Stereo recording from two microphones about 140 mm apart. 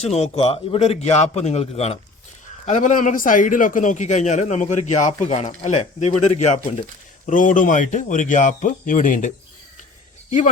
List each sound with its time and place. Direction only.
0.0 s a man's voice: 50° left (ahead or behind)
2.6 s a man's voice: 60° left (ahead or behind)
7.3 s a man's voice: 65° left (ahead or behind)